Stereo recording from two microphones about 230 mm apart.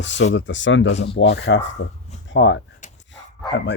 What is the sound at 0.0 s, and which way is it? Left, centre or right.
Speech, left.